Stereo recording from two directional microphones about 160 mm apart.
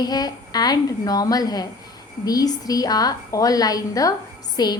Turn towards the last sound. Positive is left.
turn(degrees=25)  # may be behind; listen again after turning